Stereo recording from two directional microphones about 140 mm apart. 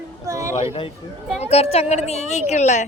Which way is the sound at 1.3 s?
50° left (ahead or behind).